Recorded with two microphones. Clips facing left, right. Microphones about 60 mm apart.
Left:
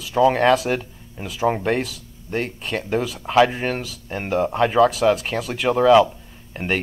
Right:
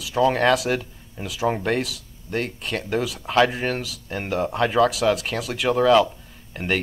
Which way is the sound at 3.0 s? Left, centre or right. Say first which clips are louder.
Left 1 dB; left.